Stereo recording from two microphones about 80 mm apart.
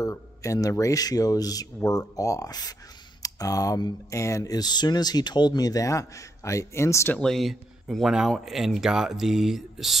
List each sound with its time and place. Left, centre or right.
0.0 s speech: left
7.2 s speech: centre